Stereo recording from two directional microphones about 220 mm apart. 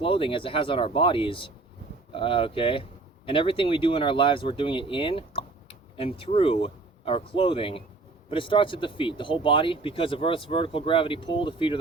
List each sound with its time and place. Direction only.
0.0 s speech: 25° left (ahead or behind)